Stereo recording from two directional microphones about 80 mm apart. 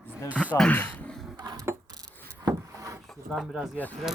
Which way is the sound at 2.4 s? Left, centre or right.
Right.